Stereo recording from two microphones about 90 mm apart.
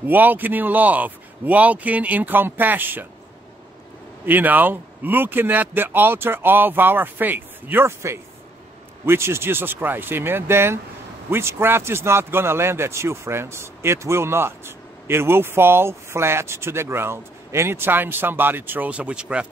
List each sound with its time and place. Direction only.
0.1 s a man's voice: 20° right (ahead or behind)
4.3 s a man's voice: 20° right (ahead or behind)